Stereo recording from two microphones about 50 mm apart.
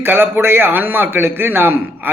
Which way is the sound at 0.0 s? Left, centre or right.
Right.